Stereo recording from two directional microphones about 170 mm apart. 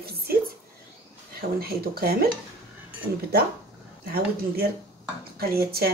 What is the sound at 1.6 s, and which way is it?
Speech, 65° right (ahead or behind).